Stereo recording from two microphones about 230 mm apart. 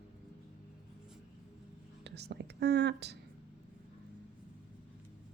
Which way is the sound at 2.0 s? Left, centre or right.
Right.